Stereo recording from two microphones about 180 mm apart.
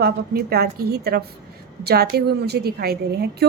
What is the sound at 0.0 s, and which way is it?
A woman's voice, 60° right (ahead or behind).